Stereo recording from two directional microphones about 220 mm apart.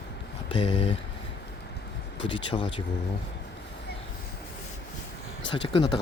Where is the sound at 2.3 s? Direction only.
25° left (ahead or behind).